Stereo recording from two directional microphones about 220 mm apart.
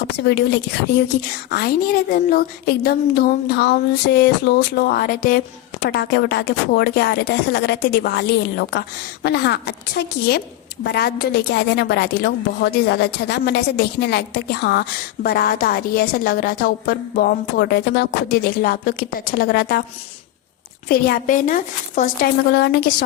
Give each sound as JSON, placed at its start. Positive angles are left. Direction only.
{"t": 0.3, "sound": "a woman's voice", "side_deg": 50}
{"t": 20.8, "sound": "a woman's voice", "side_deg": 45}